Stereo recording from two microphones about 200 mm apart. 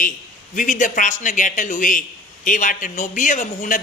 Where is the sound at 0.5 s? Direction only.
40° left (ahead or behind).